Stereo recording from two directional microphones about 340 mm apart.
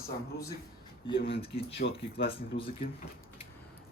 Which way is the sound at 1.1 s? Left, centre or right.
Left.